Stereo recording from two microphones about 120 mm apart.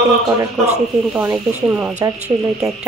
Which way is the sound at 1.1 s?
15° right (ahead or behind).